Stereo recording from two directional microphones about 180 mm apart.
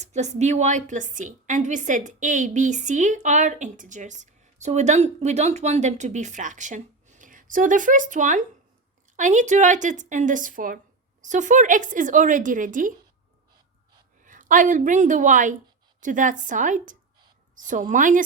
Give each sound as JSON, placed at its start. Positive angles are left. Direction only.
{"t": 0.0, "sound": "a woman's voice", "side_deg": -40}
{"t": 14.3, "sound": "a woman's voice", "side_deg": -45}